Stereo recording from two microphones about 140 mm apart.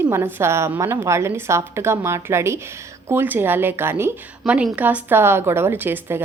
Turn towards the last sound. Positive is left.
turn(degrees=-15)  # may be behind; listen again after turning